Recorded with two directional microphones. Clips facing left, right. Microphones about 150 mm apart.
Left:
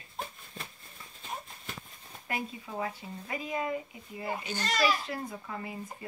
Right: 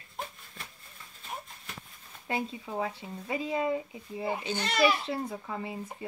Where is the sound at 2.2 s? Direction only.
25° right (ahead or behind).